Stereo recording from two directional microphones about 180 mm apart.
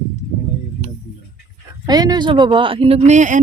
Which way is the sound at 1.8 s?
20° right (ahead or behind).